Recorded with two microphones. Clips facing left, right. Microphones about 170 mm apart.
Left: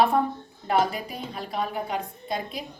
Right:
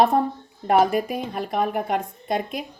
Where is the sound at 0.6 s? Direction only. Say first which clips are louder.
Right 6 dB; 50° right (ahead or behind).